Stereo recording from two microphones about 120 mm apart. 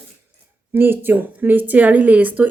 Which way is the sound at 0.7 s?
20° right (ahead or behind).